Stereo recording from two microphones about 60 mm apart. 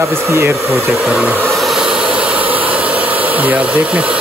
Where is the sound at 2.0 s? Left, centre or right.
Centre.